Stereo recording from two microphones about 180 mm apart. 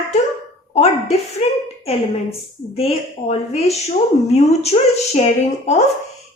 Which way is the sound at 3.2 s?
35° left (ahead or behind).